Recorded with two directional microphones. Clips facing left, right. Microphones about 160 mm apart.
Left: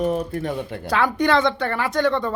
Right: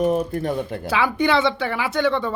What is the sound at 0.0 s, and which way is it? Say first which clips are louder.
Speech: right 2 dB; 45° right (ahead or behind).